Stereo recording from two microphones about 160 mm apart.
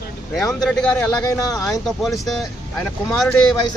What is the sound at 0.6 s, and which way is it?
Speech, 5° left (ahead or behind).